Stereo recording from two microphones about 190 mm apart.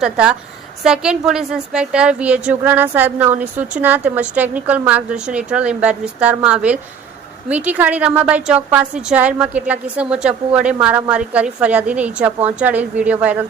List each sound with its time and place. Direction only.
0.0 s a woman's voice: 5° right (ahead or behind)